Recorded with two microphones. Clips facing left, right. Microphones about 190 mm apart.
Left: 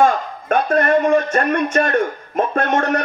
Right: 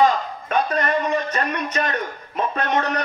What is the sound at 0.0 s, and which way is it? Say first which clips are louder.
Speech: left 2 dB; 50° left (ahead or behind).